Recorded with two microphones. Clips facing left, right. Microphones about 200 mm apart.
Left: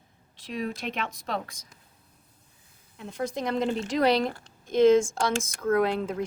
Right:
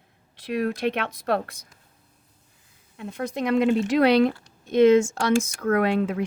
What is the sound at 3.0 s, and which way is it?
Speech, 60° right (ahead or behind).